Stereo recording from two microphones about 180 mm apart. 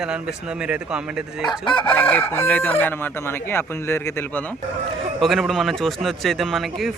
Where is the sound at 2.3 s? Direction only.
10° left (ahead or behind).